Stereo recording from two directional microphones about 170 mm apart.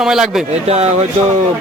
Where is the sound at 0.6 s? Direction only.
40° right (ahead or behind).